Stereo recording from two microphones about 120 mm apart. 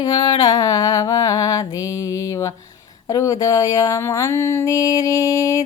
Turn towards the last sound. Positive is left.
turn(degrees=25)  # may be behind; listen again after turning